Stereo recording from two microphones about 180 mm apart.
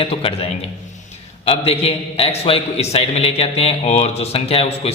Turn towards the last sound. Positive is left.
turn(degrees=35)  # may be behind; listen again after turning